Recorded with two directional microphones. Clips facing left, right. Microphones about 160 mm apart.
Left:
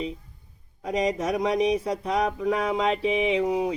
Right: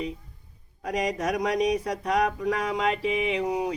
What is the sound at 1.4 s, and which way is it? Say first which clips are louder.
Music: left 2 dB; 25° left (ahead or behind).